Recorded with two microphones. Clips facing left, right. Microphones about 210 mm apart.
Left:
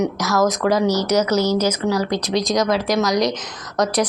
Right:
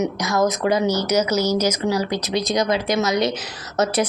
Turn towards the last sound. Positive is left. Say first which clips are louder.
# left 1 dB
turn(degrees=-5)  # may be behind; listen again after turning